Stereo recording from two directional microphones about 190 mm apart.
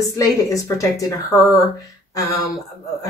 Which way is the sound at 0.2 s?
20° left (ahead or behind).